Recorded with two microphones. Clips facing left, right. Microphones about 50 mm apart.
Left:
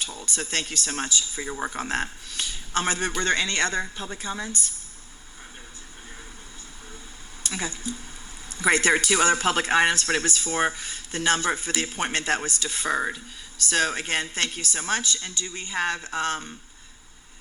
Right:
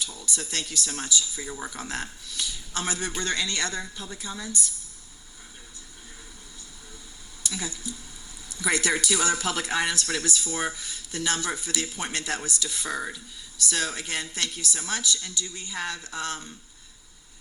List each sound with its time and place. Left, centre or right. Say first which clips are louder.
0.0 s speech: left 2 dB; left
7.4 s speech: left 3 dB; left